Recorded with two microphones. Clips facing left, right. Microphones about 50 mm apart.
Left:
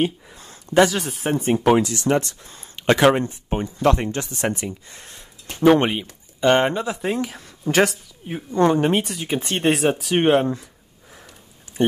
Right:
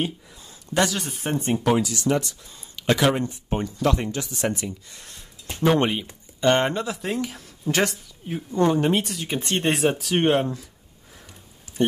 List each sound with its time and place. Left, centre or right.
0.7 s speech: centre
1.5 s speech: left
1.8 s speech: left
3.4 s speech: centre
3.8 s speech: left
4.5 s speech: left
5.7 s speech: centre
8.5 s speech: left
8.8 s speech: centre